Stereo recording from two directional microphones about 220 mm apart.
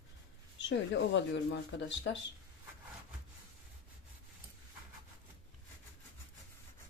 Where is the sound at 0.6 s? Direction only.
55° left (ahead or behind).